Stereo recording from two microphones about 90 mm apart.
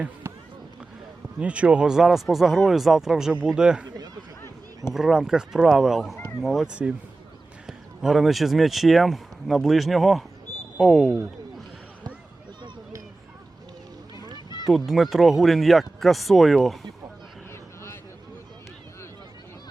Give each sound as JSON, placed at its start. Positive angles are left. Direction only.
{"t": 1.4, "sound": "speech", "side_deg": -15}
{"t": 3.8, "sound": "a sound", "side_deg": -45}
{"t": 4.9, "sound": "speech", "side_deg": -5}
{"t": 14.7, "sound": "speech", "side_deg": 0}